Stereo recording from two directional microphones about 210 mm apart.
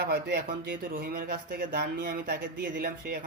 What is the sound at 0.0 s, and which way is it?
Speech, 50° right (ahead or behind).